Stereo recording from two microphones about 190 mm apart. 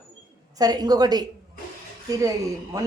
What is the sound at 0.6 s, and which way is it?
Speech, 20° right (ahead or behind).